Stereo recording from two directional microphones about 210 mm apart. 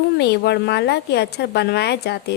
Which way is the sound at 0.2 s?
50° left (ahead or behind).